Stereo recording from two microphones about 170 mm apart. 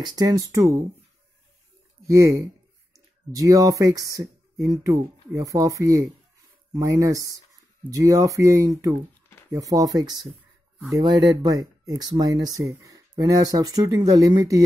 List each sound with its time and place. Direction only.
0.0 s speech: 25° right (ahead or behind)
2.0 s speech: 15° right (ahead or behind)